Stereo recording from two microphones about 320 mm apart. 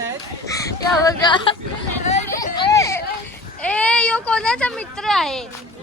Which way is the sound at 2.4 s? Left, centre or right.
Centre.